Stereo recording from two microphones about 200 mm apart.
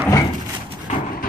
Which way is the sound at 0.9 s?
35° left (ahead or behind).